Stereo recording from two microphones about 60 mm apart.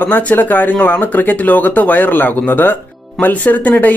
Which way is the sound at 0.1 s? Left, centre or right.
Left.